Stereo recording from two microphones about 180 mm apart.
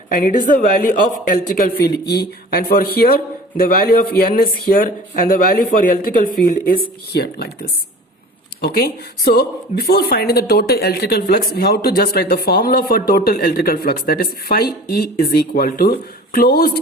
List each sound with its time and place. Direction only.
0.1 s a man's voice: 50° left (ahead or behind)
8.6 s a man's voice: 60° left (ahead or behind)